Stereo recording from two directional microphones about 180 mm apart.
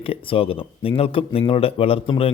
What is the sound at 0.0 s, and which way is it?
Speech, 30° left (ahead or behind).